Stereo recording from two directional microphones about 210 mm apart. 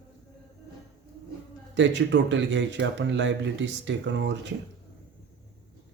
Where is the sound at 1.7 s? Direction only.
60° right (ahead or behind).